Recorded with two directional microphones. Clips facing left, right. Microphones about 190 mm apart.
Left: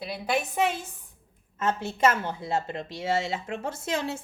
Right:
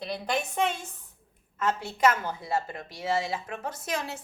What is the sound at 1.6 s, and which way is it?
A woman's voice, 25° left (ahead or behind).